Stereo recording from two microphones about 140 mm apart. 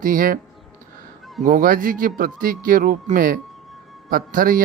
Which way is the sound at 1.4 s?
80° right.